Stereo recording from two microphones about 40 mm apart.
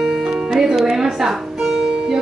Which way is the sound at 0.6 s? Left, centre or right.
Centre.